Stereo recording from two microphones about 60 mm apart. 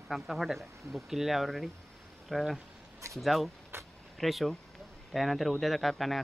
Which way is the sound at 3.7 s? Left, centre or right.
Right.